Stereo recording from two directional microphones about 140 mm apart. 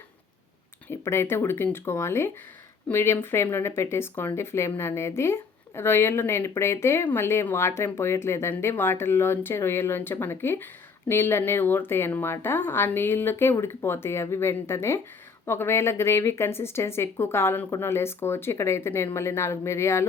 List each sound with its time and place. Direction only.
0.9 s speech: 20° left (ahead or behind)